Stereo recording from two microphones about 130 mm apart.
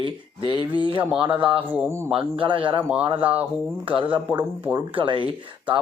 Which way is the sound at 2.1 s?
40° right (ahead or behind).